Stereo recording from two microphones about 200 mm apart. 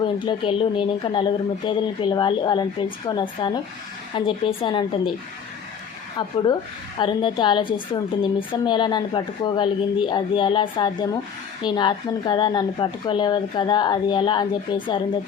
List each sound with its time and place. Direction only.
0.0 s speech: 25° left (ahead or behind)
6.1 s speech: 20° left (ahead or behind)